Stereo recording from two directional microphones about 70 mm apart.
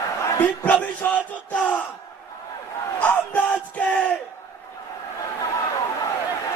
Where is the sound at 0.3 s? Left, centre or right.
Left.